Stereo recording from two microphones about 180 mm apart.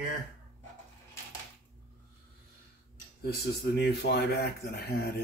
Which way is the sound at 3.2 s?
65° left (ahead or behind).